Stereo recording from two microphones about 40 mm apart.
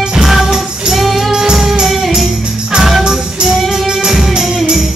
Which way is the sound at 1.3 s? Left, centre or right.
Centre.